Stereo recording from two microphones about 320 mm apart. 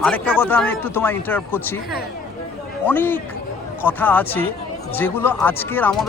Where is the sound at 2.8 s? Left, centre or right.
Centre.